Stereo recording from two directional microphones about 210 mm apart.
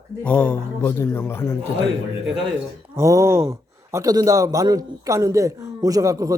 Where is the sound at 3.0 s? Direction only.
15° right (ahead or behind).